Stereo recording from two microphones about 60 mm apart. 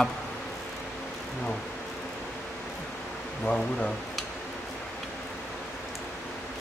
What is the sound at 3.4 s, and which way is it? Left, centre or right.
Speech, centre.